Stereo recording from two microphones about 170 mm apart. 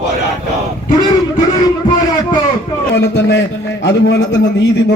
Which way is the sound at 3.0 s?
90° left.